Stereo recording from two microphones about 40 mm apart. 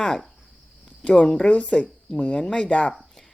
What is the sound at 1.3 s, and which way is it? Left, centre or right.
Speech, left.